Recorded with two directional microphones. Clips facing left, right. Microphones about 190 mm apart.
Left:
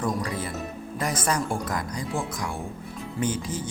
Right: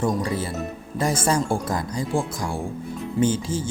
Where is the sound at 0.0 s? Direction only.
25° right (ahead or behind).